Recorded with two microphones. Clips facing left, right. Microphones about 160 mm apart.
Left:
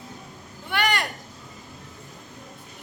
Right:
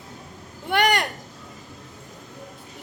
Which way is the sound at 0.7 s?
50° right (ahead or behind).